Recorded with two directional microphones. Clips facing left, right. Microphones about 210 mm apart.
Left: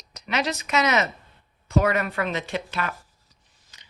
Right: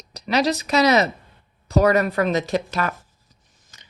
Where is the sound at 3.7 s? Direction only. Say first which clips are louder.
Right 4 dB; 45° right (ahead or behind).